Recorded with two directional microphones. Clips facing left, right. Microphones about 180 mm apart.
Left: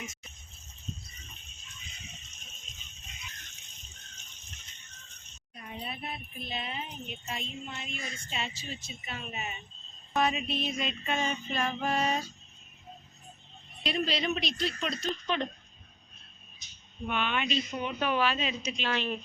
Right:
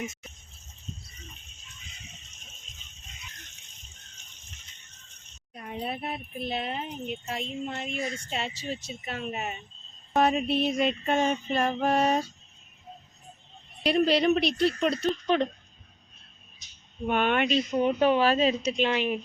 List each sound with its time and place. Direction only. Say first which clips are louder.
5.5 s speech: right 7 dB; 60° right (ahead or behind)
13.8 s speech: right 9 dB; 60° right (ahead or behind)
17.1 s speech: right 7 dB; 50° right (ahead or behind)
17.7 s speech: right 9 dB; 35° right (ahead or behind)
18.5 s speech: right 7 dB; centre (ahead or behind)
18.8 s a woman's voice: right 3 dB; 15° right (ahead or behind)